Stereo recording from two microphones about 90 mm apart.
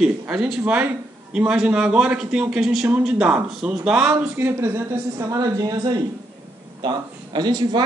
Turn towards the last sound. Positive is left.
turn(degrees=-50)  # may be behind; listen again after turning